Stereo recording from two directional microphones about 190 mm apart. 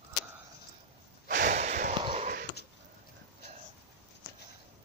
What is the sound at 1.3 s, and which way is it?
Snort, 45° right (ahead or behind).